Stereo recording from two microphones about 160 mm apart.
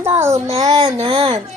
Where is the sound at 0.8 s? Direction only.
35° right (ahead or behind).